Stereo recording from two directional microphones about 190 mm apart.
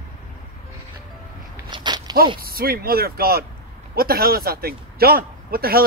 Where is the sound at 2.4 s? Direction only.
50° right (ahead or behind).